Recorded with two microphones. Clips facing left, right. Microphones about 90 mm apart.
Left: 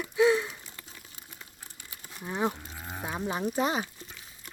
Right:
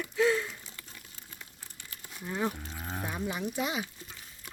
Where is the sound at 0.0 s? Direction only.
20° left (ahead or behind).